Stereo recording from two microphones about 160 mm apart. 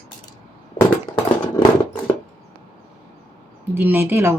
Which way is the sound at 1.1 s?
25° left (ahead or behind).